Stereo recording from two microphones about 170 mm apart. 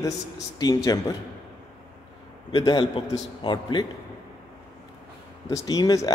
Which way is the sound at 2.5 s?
25° left (ahead or behind).